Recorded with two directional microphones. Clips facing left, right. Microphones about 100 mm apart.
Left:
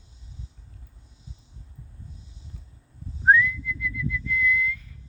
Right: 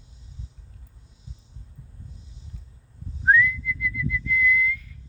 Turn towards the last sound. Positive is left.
turn(degrees=30)  # may be behind; listen again after turning